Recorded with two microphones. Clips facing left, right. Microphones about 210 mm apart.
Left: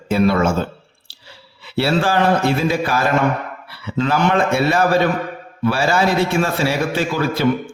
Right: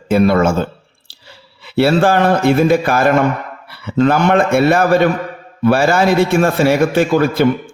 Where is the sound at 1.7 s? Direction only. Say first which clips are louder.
Right 5 dB; 55° right (ahead or behind).